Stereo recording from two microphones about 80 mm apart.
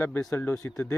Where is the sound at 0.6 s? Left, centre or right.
Left.